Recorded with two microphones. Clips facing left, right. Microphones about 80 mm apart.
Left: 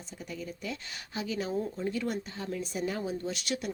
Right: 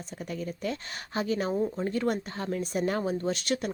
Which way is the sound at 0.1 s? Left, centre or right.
Right.